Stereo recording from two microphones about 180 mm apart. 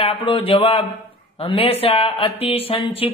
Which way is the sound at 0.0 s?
30° left (ahead or behind).